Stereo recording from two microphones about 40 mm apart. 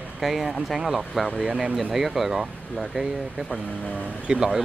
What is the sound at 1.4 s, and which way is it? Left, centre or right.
Speech, right.